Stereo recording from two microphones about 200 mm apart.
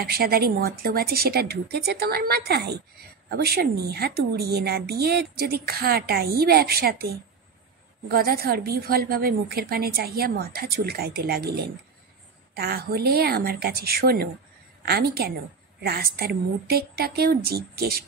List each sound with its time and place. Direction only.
0.0 s a woman's voice: 50° right (ahead or behind)
8.1 s a woman's voice: 50° right (ahead or behind)